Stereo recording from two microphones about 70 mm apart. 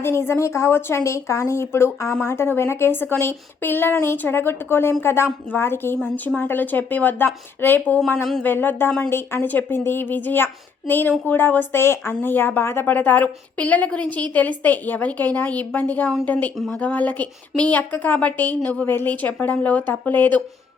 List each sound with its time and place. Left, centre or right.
0.0 s a woman's voice: left
7.9 s speech: centre
8.4 s a woman's voice: left